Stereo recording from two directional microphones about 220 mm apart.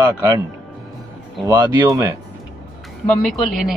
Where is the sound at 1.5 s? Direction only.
15° right (ahead or behind).